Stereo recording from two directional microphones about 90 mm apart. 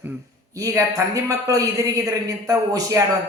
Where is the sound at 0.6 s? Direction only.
40° right (ahead or behind).